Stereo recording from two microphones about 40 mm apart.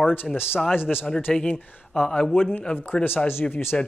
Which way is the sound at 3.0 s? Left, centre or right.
Left.